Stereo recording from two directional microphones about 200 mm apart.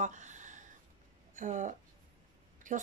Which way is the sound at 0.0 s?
40° right (ahead or behind).